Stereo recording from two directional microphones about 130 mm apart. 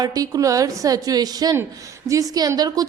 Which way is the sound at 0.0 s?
30° right (ahead or behind).